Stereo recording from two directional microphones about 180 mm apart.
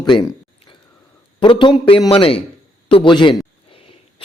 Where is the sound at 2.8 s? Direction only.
30° left (ahead or behind).